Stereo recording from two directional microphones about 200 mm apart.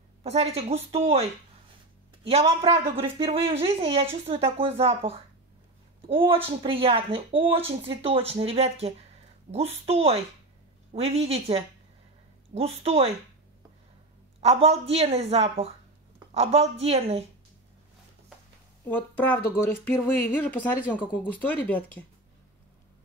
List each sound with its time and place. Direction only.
0.2 s a woman's voice: 30° right (ahead or behind)
2.2 s a woman's voice: 30° right (ahead or behind)
14.4 s a woman's voice: 30° right (ahead or behind)
18.9 s speech: 10° left (ahead or behind)